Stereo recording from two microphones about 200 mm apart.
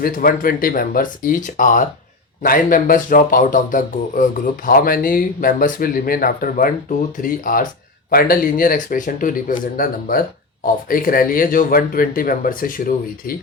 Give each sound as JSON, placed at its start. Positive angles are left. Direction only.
{"t": 0.0, "sound": "speech", "side_deg": 45}